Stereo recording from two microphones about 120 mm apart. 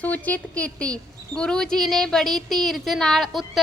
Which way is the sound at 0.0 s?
15° left (ahead or behind).